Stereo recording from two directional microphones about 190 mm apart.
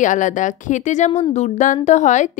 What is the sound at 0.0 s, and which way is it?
A woman's voice, 40° left (ahead or behind).